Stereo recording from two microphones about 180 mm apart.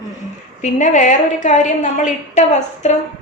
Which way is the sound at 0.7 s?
45° left (ahead or behind).